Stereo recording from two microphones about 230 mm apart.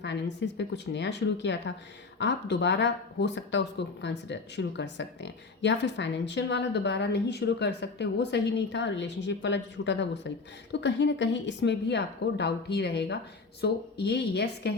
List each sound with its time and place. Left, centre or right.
0.0 s speech: left